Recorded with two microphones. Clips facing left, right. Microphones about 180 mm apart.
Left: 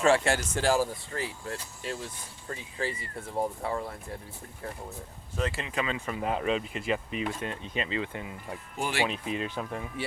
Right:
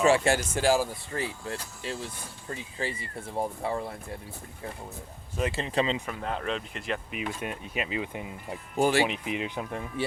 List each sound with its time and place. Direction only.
0.0 s speech: 10° right (ahead or behind)
1.1 s speech: 25° right (ahead or behind)
5.5 s speech: 30° right (ahead or behind)
6.1 s speech: 5° left (ahead or behind)
7.2 s speech: 10° right (ahead or behind)
8.7 s speech: 40° right (ahead or behind)
9.0 s speech: 15° right (ahead or behind)